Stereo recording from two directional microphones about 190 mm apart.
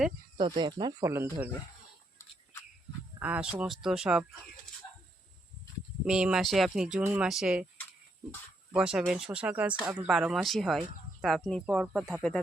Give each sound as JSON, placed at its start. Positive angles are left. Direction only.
{"t": 0.3, "sound": "speech", "side_deg": -25}
{"t": 3.2, "sound": "speech", "side_deg": -10}
{"t": 6.1, "sound": "speech", "side_deg": -5}
{"t": 8.7, "sound": "speech", "side_deg": -5}